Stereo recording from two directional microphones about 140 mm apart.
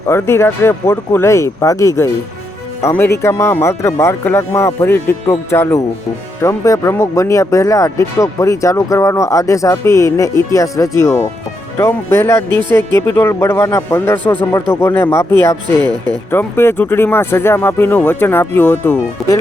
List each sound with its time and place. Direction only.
0.1 s speech: 20° left (ahead or behind)
15.8 s speech: 30° right (ahead or behind)
16.3 s speech: 15° left (ahead or behind)